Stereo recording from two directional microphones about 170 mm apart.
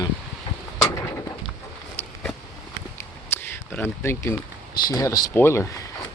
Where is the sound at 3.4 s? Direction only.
10° left (ahead or behind).